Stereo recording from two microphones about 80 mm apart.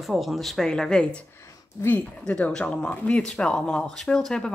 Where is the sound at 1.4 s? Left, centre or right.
Left.